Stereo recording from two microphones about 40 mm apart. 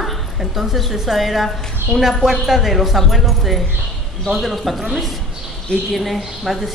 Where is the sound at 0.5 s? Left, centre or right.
Centre.